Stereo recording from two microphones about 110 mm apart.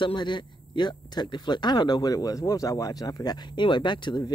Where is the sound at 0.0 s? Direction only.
45° left (ahead or behind).